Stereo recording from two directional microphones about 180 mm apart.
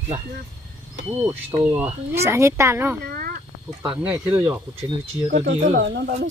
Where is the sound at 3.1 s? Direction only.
50° right (ahead or behind).